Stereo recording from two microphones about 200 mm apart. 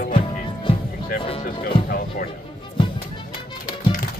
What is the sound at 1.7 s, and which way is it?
Speech, 30° left (ahead or behind).